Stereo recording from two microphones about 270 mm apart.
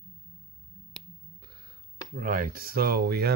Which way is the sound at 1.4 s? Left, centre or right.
Right.